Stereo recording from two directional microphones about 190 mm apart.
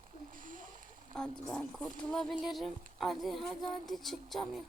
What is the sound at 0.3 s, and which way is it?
Rowboat, 45° right (ahead or behind).